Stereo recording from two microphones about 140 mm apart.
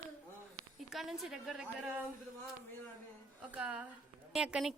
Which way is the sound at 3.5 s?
10° right (ahead or behind).